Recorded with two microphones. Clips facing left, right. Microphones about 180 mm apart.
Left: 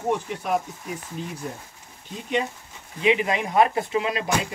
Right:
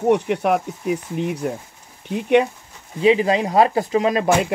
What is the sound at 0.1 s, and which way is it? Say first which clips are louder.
Speech: right 7 dB; 65° right (ahead or behind).